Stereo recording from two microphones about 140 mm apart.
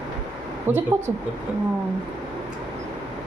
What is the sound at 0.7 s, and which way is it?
Speech, 15° right (ahead or behind).